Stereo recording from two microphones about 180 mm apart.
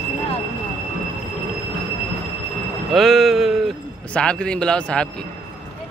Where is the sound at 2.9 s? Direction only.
Centre (ahead or behind).